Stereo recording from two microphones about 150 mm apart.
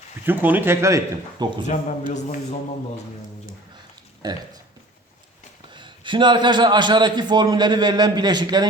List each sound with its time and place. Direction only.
0.3 s speech: 10° right (ahead or behind)
1.6 s a man's voice: 55° left (ahead or behind)
4.2 s a man's voice: 25° right (ahead or behind)
5.7 s a man's voice: 30° right (ahead or behind)